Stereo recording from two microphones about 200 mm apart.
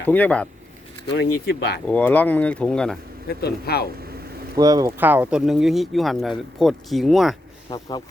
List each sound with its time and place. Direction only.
0.0 s speech: 10° left (ahead or behind)
1.1 s speech: 55° left (ahead or behind)
1.9 s speech: 10° left (ahead or behind)
3.2 s speech: 55° left (ahead or behind)
4.5 s speech: 20° right (ahead or behind); by 7.3 s centre (ahead or behind)
7.7 s speech: 20° left (ahead or behind)